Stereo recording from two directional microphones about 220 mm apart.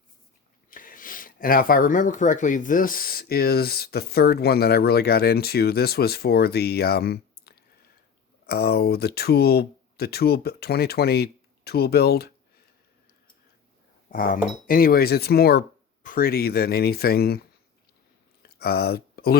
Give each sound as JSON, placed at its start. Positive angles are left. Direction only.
{"t": 0.7, "sound": "speech", "side_deg": 40}
{"t": 14.1, "sound": "speech", "side_deg": 40}
{"t": 18.4, "sound": "speech", "side_deg": 45}